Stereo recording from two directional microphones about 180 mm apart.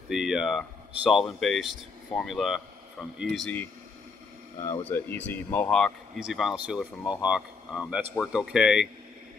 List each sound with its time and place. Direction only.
0.1 s speech: 5° right (ahead or behind)
4.9 s speech: 10° left (ahead or behind)